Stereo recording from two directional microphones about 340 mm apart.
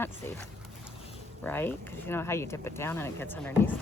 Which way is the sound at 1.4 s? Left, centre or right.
Centre.